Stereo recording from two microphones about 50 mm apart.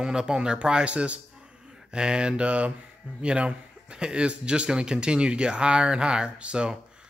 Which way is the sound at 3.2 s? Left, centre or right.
Right.